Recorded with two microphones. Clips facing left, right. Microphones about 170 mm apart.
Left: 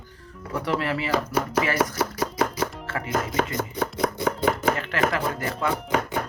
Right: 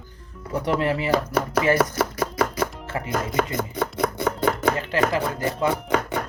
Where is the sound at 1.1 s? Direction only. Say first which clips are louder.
Right 2 dB; 60° right (ahead or behind).